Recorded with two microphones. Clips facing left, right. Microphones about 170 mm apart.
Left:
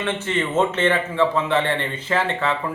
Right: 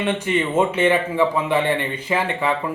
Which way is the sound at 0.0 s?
15° right (ahead or behind).